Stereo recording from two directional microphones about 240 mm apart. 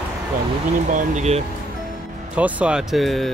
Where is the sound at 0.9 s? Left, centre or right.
Right.